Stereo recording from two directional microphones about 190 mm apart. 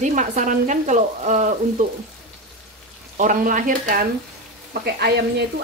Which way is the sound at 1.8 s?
40° right (ahead or behind).